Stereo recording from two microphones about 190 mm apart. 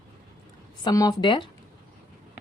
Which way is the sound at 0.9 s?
20° left (ahead or behind).